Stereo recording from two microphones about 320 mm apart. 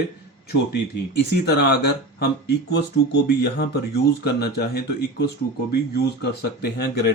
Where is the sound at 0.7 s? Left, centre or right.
Left.